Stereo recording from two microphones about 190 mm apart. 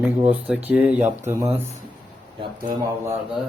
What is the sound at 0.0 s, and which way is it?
Speech, 10° right (ahead or behind).